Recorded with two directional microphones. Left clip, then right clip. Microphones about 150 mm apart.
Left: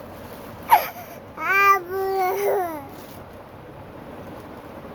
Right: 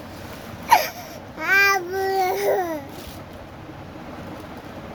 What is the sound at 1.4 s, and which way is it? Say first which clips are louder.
Babbling: even; 20° left (ahead or behind).